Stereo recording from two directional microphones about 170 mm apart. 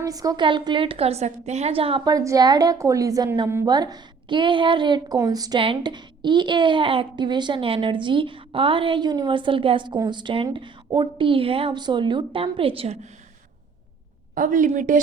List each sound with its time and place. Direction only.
0.0 s a woman's voice: 20° right (ahead or behind)
2.1 s a woman's voice: 20° right (ahead or behind)
14.3 s a woman's voice: 50° right (ahead or behind)